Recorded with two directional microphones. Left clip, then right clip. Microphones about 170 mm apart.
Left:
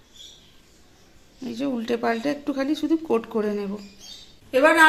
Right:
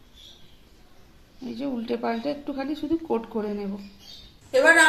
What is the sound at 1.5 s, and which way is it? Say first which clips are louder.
Speech: left 3 dB; 60° left (ahead or behind).